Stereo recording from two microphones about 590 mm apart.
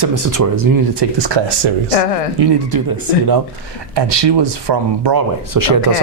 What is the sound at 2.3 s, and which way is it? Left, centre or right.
Speech, right.